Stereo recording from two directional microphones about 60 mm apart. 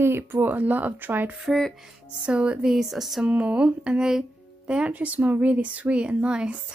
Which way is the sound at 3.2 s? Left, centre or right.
Right.